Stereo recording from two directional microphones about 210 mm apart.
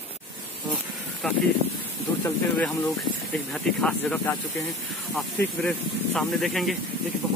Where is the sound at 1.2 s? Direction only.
Centre (ahead or behind).